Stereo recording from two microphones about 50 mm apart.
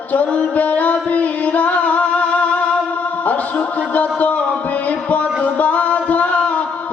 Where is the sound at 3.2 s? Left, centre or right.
Left.